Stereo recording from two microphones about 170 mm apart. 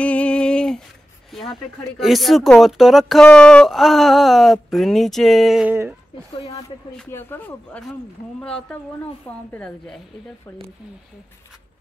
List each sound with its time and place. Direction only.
0.0 s a sound: 5° left (ahead or behind)
1.3 s speech: centre (ahead or behind)
6.3 s speech: 35° left (ahead or behind)
7.1 s speech: 10° left (ahead or behind)